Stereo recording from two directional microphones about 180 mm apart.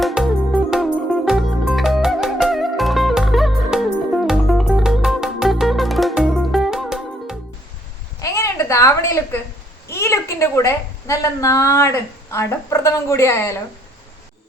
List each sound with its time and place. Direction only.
0.0 s music: centre (ahead or behind)
8.2 s a sound: 15° left (ahead or behind)
9.9 s a woman's voice: 15° left (ahead or behind)